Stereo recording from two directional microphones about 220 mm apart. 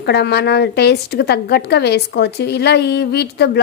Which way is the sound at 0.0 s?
50° left (ahead or behind).